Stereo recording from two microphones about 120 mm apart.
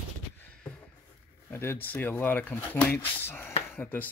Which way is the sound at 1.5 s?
15° left (ahead or behind).